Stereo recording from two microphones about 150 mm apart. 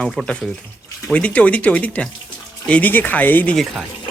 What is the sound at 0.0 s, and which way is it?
Speech, 5° left (ahead or behind).